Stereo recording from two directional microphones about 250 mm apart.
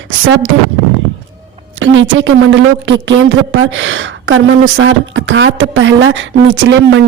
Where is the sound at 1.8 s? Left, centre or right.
Right.